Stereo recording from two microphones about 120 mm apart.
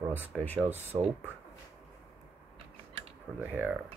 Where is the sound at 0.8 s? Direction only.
65° right (ahead or behind).